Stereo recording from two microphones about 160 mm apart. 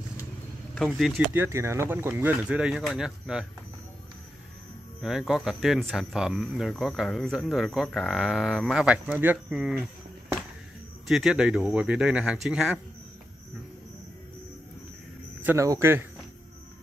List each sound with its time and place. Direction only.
0.7 s speech: 5° left (ahead or behind)
1.3 s speech: 15° right (ahead or behind)
5.0 s speech: 5° right (ahead or behind)
11.1 s speech: 5° right (ahead or behind)
15.4 s speech: 20° right (ahead or behind)